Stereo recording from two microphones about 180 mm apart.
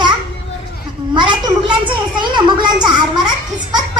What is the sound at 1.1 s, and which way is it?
A child's voice, 25° right (ahead or behind).